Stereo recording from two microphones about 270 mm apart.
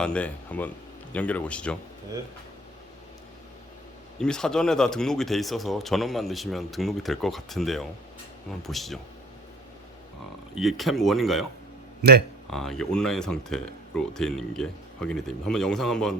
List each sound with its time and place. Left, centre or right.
0.0 s speech: centre
4.2 s speech: centre
10.5 s speech: centre
12.0 s speech: right
12.5 s speech: centre